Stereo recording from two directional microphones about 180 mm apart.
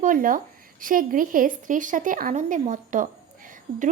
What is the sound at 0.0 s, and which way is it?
Speech, 50° right (ahead or behind).